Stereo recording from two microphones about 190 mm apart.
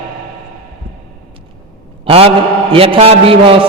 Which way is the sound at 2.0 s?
30° right (ahead or behind).